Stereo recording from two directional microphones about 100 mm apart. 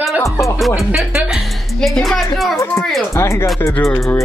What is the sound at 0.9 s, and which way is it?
Speech, 5° right (ahead or behind).